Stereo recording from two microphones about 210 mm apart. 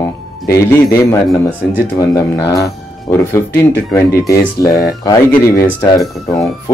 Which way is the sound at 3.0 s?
10° left (ahead or behind).